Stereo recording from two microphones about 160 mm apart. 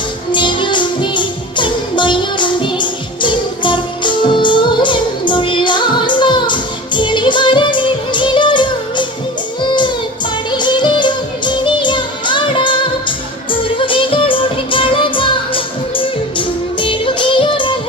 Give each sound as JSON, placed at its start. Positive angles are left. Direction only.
{"t": 0.3, "sound": "music", "side_deg": 30}